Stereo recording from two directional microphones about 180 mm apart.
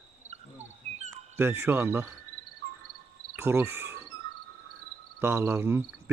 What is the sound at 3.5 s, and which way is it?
Speech, 10° right (ahead or behind).